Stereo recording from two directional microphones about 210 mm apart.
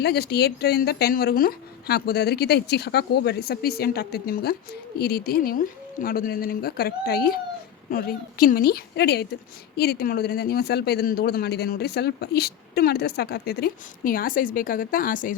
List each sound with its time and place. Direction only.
0.0 s speech: 50° left (ahead or behind)